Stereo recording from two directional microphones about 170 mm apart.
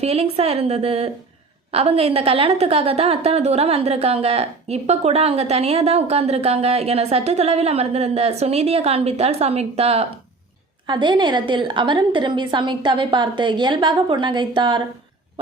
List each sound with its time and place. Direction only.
0.0 s a woman's voice: 35° right (ahead or behind)